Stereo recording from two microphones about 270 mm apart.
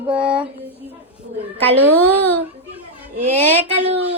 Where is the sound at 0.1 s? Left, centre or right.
Centre.